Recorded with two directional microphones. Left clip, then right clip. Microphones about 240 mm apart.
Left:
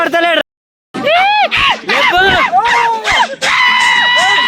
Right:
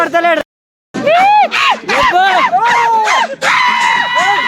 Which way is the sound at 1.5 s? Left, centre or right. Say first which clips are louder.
Even; right.